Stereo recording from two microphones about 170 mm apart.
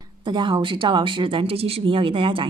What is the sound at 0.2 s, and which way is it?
Speech, 30° right (ahead or behind).